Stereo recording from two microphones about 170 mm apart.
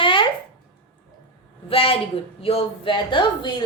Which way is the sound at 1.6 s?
35° left (ahead or behind).